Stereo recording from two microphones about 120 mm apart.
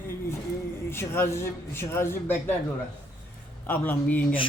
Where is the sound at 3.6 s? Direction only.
15° left (ahead or behind).